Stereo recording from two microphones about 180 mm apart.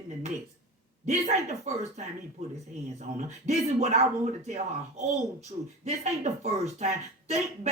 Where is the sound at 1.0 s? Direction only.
40° right (ahead or behind).